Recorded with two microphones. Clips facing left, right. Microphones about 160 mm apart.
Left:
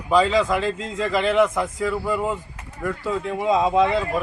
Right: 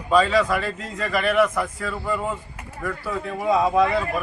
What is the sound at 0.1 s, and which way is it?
A man's voice, 20° left (ahead or behind).